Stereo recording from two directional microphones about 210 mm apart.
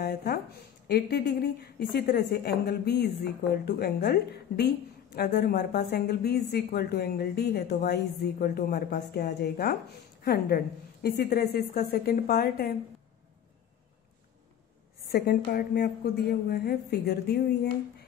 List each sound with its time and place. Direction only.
0.0 s a sound: 50° left (ahead or behind)
0.8 s a woman's voice: 50° left (ahead or behind)
15.0 s a woman's voice: 45° left (ahead or behind)